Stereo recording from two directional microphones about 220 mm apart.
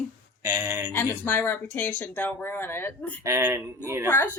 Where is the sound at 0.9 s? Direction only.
10° left (ahead or behind).